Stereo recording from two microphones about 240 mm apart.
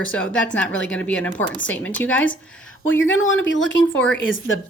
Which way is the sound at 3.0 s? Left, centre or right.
Left.